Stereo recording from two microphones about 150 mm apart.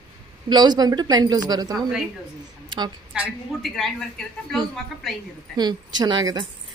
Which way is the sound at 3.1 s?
Centre (ahead or behind).